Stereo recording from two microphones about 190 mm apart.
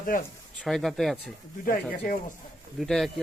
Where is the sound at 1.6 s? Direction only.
45° left (ahead or behind).